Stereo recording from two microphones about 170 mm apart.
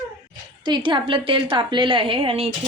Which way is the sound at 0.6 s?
25° right (ahead or behind).